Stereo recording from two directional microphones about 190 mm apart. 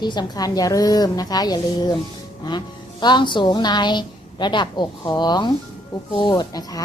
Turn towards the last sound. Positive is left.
turn(degrees=20)  # may be behind; listen again after turning